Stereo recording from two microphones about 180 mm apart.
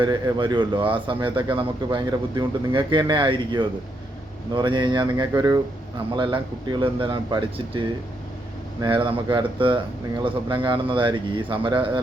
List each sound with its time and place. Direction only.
0.0 s speech: 25° right (ahead or behind)